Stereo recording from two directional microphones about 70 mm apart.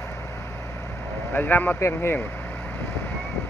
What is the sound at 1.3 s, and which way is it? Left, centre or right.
Speech, left.